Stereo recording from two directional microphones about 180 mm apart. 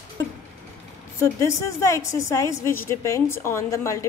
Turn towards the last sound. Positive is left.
turn(degrees=15)  # may be behind; listen again after turning